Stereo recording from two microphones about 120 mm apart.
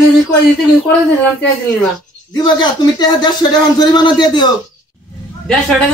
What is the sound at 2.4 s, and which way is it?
Speech, 40° left (ahead or behind).